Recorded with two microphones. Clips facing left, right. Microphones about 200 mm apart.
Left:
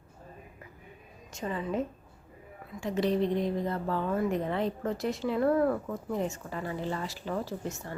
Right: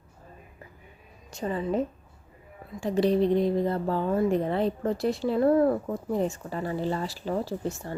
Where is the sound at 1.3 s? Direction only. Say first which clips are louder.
Right 4 dB; 35° right (ahead or behind).